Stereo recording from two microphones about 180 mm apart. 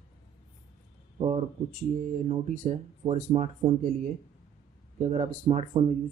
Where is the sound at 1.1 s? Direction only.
35° right (ahead or behind).